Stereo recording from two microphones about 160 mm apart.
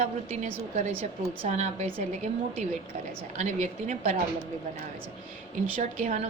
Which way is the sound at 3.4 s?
45° right (ahead or behind).